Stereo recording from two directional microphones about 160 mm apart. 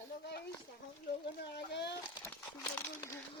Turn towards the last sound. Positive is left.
turn(degrees=15)  # may be behind; listen again after turning